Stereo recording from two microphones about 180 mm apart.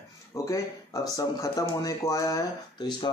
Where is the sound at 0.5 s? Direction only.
20° left (ahead or behind).